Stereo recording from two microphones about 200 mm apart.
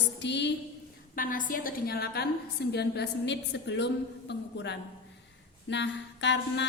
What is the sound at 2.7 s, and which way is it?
Mantra, 55° left (ahead or behind).